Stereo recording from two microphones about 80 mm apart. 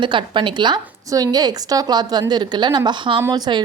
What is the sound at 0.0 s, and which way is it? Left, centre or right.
Speech, right.